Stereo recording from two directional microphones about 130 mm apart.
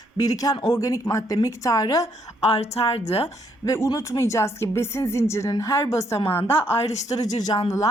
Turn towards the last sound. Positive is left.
turn(degrees=30)  # may be behind; listen again after turning